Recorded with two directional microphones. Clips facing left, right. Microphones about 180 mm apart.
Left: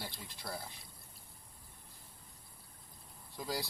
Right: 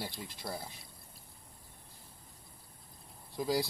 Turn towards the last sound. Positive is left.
turn(degrees=-10)  # may be behind; listen again after turning